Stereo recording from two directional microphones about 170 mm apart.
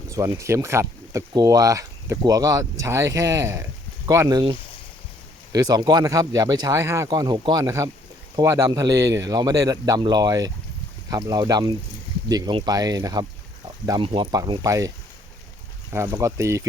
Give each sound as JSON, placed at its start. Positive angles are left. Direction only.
{"t": 0.1, "sound": "speech", "side_deg": -15}